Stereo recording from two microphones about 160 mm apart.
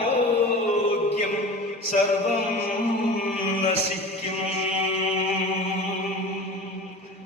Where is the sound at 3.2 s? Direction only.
45° left (ahead or behind).